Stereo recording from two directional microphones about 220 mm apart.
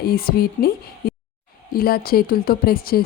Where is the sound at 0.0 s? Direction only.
45° left (ahead or behind).